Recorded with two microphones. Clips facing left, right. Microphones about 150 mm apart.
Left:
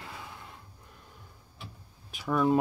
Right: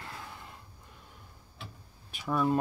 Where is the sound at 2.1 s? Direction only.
Centre (ahead or behind).